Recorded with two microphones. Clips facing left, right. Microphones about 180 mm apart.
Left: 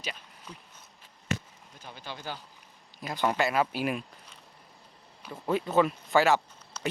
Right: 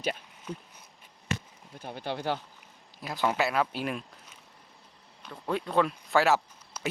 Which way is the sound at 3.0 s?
Centre (ahead or behind).